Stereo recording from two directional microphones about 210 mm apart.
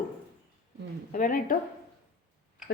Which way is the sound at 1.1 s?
40° left (ahead or behind).